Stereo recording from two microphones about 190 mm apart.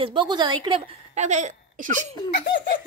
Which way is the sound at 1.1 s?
40° right (ahead or behind).